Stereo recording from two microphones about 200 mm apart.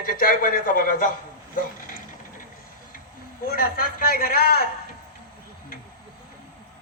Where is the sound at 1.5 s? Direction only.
45° left (ahead or behind).